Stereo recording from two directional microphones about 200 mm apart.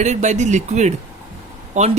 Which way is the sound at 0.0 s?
35° right (ahead or behind).